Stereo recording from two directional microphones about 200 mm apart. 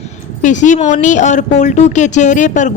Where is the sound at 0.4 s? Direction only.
40° left (ahead or behind).